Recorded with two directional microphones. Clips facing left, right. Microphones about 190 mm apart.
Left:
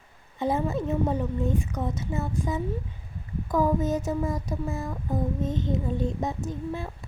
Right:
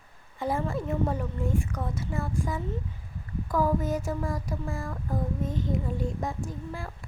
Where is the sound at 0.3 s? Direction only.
20° left (ahead or behind).